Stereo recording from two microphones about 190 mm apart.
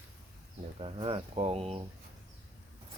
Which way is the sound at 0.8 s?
30° right (ahead or behind).